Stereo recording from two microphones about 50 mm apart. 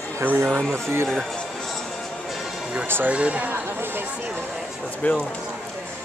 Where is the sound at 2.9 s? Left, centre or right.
Right.